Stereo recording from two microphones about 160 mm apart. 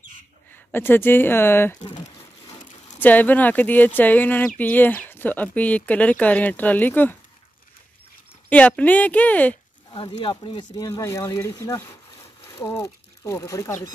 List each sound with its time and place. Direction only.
0.7 s speech: 15° left (ahead or behind)
3.0 s speech: 10° left (ahead or behind)
8.5 s speech: 10° left (ahead or behind)
10.4 s speech: 30° left (ahead or behind)
10.9 s speech: 20° left (ahead or behind)